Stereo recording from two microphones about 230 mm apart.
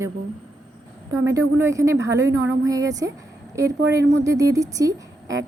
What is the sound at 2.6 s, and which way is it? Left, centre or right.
Speech, centre.